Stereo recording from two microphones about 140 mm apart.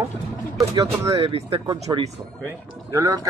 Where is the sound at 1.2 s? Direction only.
40° right (ahead or behind).